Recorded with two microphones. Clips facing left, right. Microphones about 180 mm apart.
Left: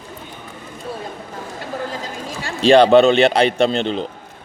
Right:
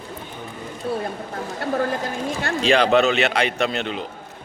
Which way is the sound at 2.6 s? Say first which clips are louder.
Left 7 dB; 30° left (ahead or behind).